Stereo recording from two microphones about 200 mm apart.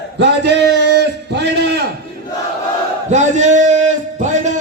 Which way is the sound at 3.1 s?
35° right (ahead or behind).